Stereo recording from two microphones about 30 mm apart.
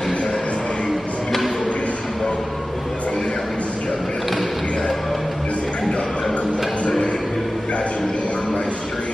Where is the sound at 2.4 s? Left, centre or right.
Centre.